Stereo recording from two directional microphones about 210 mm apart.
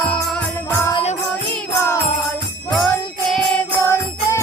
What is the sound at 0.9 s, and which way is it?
Jingle bell, 25° left (ahead or behind).